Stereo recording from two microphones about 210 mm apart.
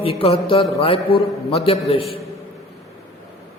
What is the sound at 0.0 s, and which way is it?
A man's voice, 25° left (ahead or behind).